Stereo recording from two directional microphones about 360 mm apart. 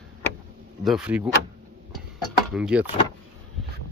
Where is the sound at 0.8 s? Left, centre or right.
Centre.